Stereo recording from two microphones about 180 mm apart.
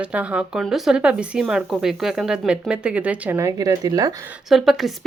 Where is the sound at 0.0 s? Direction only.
5° right (ahead or behind).